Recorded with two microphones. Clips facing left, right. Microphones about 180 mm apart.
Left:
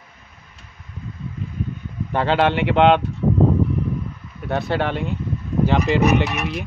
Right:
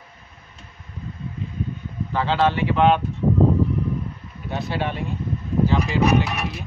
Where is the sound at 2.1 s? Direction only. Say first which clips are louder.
Left 2 dB; 60° left (ahead or behind).